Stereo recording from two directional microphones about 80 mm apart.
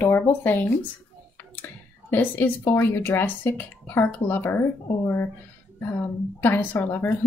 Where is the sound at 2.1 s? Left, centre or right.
Left.